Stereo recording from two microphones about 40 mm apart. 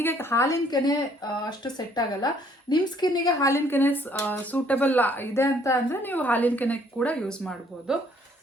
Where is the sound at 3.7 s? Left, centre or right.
Left.